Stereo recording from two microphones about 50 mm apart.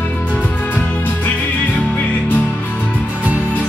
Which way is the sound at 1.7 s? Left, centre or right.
Left.